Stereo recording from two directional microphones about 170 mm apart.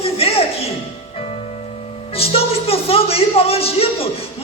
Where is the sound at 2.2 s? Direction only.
35° left (ahead or behind).